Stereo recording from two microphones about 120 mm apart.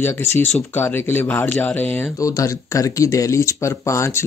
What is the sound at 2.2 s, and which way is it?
Speech, 25° left (ahead or behind).